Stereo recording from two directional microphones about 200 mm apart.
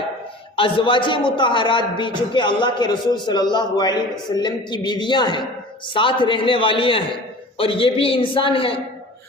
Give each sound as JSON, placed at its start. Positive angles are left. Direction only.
{"t": 0.5, "sound": "a man's voice", "side_deg": 25}